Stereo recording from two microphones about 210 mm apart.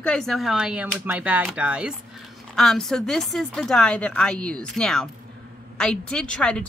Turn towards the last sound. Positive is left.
turn(degrees=5)  # may be behind; listen again after turning